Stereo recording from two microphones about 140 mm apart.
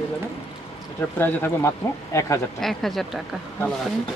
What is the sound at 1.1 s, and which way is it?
Speech, 15° left (ahead or behind).